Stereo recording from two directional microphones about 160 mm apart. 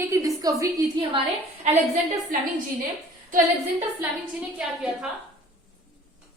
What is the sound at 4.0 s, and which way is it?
A woman's voice, 10° right (ahead or behind).